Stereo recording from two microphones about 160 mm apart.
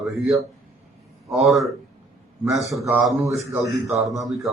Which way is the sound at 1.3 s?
Centre (ahead or behind).